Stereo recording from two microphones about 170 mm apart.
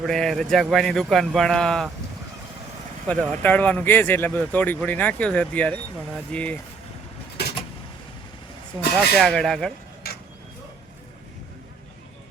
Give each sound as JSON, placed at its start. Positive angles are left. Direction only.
{"t": 0.0, "sound": "speech", "side_deg": 0}
{"t": 3.1, "sound": "speech", "side_deg": 10}
{"t": 7.4, "sound": "vehicle", "side_deg": 75}
{"t": 9.1, "sound": "speech", "side_deg": 0}